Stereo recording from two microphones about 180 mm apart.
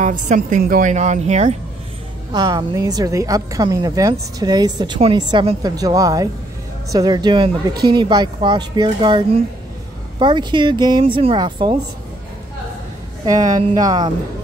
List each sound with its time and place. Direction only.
0.0 s a woman's voice: 45° right (ahead or behind)
2.3 s a woman's voice: 20° right (ahead or behind)
13.2 s a woman's voice: 20° right (ahead or behind)